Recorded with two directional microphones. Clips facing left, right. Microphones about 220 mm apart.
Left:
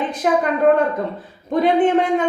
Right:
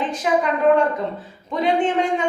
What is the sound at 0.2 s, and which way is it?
Speech, 50° left (ahead or behind).